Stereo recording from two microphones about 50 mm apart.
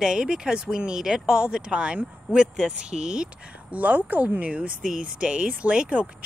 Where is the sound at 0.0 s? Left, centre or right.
Centre.